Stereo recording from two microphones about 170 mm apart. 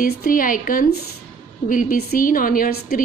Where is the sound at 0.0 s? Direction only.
55° left (ahead or behind).